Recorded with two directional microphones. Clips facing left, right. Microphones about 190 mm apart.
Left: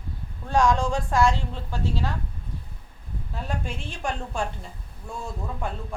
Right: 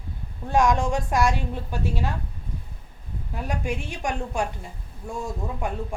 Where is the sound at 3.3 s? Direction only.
15° right (ahead or behind).